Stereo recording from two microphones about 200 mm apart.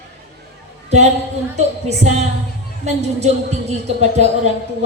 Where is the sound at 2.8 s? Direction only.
35° right (ahead or behind).